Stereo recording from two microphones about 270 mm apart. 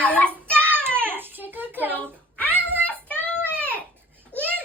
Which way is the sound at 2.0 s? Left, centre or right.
Centre.